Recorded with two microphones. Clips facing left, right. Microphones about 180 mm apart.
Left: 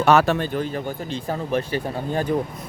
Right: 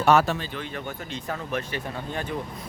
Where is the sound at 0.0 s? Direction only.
75° left (ahead or behind).